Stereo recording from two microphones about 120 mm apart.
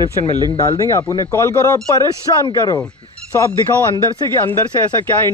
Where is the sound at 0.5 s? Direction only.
30° left (ahead or behind).